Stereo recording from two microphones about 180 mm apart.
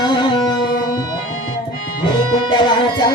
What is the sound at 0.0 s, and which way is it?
Music, 25° left (ahead or behind).